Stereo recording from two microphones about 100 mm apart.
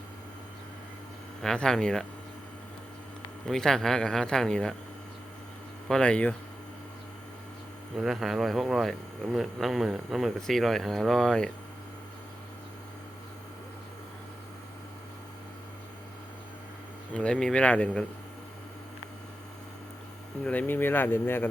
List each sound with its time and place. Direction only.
1.4 s speech: 5° left (ahead or behind)
3.4 s speech: 5° left (ahead or behind)
5.9 s speech: 10° left (ahead or behind)
7.9 s speech: centre (ahead or behind)
17.2 s speech: 10° left (ahead or behind)
20.4 s speech: 15° left (ahead or behind)